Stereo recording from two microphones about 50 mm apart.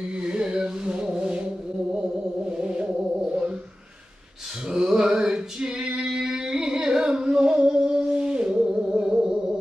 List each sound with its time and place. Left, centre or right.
0.2 s a sound: centre
2.4 s music: centre
4.6 s male singing: centre